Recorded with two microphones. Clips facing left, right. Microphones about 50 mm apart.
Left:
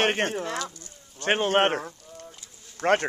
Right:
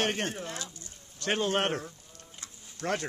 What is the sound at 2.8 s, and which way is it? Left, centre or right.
Speech, left.